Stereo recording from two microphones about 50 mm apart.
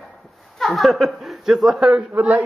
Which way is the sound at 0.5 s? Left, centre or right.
Centre.